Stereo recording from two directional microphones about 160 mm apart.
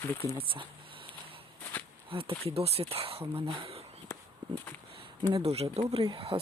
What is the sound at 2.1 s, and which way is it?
Speech, 35° right (ahead or behind).